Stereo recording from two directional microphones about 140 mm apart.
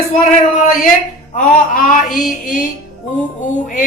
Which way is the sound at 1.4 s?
70° left (ahead or behind).